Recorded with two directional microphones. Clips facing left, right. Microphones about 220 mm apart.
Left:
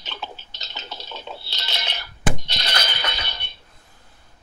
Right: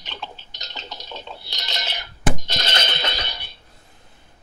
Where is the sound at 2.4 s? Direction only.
45° right (ahead or behind).